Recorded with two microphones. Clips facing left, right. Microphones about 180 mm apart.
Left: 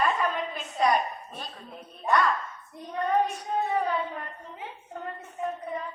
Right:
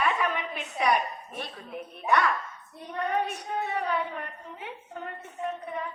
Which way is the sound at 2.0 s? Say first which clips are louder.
Left 1 dB; 65° right (ahead or behind).